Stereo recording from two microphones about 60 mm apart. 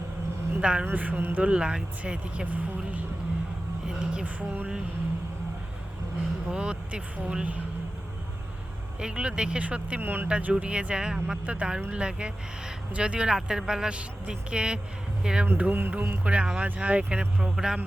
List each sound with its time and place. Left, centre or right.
0.6 s speech: centre
0.9 s speech: right
1.5 s speech: centre
3.8 s a sound: centre
4.4 s speech: right
6.5 s speech: centre
9.0 s speech: centre
10.0 s speech: right
10.2 s speech: centre
15.4 s speech: right
17.4 s speech: centre